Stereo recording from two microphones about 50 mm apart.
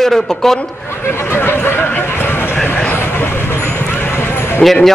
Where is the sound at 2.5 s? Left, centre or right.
Left.